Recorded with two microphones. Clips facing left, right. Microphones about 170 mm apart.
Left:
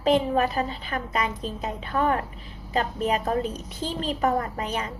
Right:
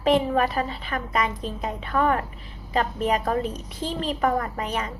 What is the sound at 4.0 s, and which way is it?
Speech, 35° left (ahead or behind).